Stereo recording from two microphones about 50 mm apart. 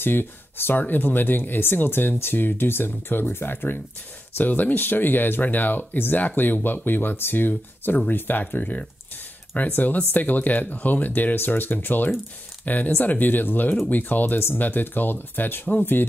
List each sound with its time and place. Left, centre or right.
0.0 s speech: left